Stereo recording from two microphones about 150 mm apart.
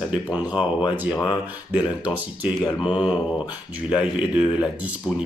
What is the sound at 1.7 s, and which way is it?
Speech, 10° right (ahead or behind).